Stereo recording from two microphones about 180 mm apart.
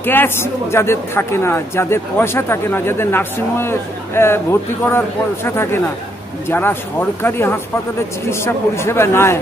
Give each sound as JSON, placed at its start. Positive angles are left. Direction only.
{"t": 0.0, "sound": "speech", "side_deg": 10}